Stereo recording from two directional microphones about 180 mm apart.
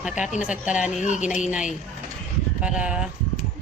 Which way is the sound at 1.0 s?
40° left (ahead or behind).